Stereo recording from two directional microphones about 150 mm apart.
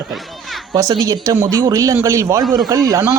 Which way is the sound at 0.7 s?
25° right (ahead or behind).